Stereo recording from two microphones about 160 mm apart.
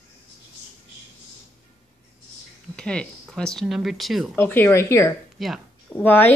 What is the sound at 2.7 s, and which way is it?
Speech, 5° left (ahead or behind).